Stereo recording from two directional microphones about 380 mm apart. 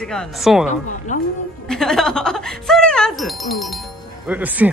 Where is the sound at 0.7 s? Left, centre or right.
Centre.